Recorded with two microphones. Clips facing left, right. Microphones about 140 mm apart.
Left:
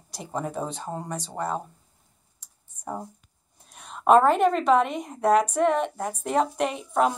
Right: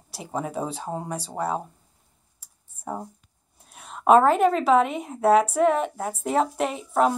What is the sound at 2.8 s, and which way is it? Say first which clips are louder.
A woman's voice: right 1 dB; 10° right (ahead or behind).